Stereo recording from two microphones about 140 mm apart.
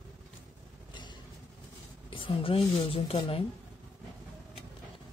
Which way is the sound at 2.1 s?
40° left (ahead or behind).